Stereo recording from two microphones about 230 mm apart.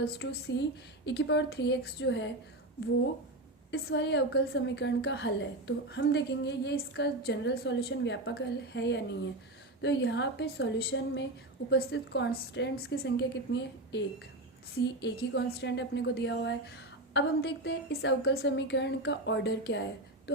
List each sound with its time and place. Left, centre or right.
0.0 s a woman's voice: left
3.7 s a woman's voice: left